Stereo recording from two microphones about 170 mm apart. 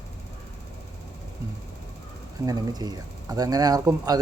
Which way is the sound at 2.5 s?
20° right (ahead or behind).